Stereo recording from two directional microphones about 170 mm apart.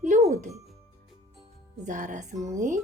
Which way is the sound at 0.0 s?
45° right (ahead or behind).